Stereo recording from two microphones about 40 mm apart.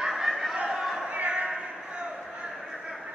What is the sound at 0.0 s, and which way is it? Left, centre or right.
Battle cry, centre.